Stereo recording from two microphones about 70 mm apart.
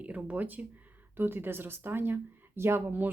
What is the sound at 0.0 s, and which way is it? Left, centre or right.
Speech, centre.